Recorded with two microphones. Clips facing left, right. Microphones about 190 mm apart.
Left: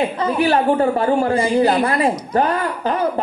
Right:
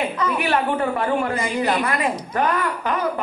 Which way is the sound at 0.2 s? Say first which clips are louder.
Left 5 dB; 30° left (ahead or behind).